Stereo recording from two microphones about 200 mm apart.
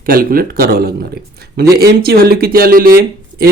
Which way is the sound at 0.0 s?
45° right (ahead or behind).